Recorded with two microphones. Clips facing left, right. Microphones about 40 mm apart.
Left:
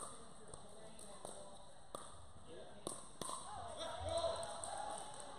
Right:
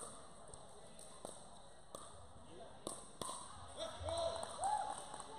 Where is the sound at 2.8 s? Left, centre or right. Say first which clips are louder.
Even; centre.